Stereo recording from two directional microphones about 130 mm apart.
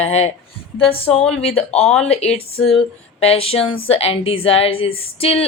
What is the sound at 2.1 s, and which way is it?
A woman's voice, 55° left (ahead or behind).